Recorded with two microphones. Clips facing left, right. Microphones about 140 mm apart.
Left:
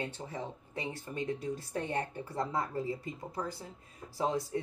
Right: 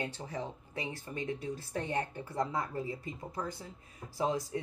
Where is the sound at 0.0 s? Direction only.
30° left (ahead or behind).